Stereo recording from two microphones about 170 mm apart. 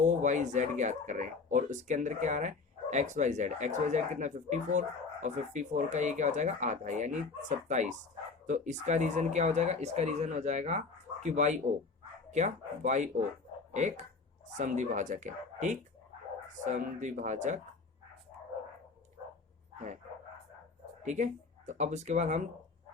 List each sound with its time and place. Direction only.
0.1 s speech: 45° right (ahead or behind)
21.0 s speech: 45° right (ahead or behind)